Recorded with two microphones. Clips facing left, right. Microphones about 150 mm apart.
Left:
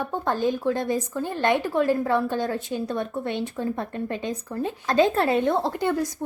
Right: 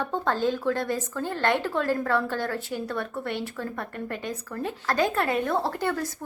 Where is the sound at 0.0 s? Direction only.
15° left (ahead or behind); by 5.5 s 30° left (ahead or behind).